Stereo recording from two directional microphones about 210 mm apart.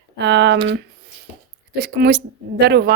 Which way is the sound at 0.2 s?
55° right (ahead or behind).